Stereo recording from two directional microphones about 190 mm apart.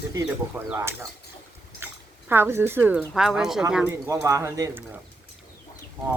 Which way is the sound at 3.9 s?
15° right (ahead or behind).